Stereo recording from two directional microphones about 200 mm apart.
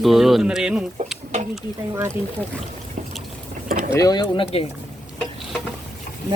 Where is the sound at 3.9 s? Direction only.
20° left (ahead or behind).